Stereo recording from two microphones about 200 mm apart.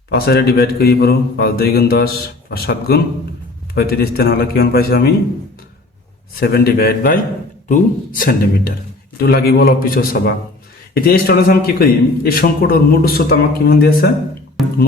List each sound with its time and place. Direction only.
0.1 s a man's voice: 55° left (ahead or behind)
6.4 s a man's voice: 50° left (ahead or behind)
14.6 s speech: centre (ahead or behind)